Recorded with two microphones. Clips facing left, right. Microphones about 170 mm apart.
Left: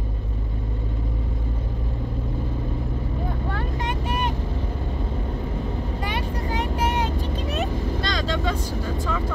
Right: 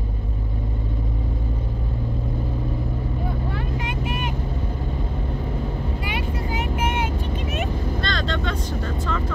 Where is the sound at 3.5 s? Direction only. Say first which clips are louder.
Even; 40° left (ahead or behind).